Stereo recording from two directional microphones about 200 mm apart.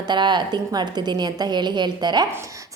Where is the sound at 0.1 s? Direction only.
20° right (ahead or behind).